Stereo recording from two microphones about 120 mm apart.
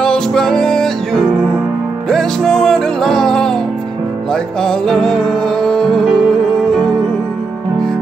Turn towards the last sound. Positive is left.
turn(degrees=5)  # may be behind; listen again after turning